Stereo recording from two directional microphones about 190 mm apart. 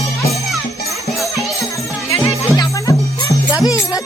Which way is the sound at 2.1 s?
20° left (ahead or behind).